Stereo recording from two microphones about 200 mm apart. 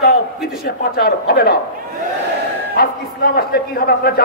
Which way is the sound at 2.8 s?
50° left (ahead or behind).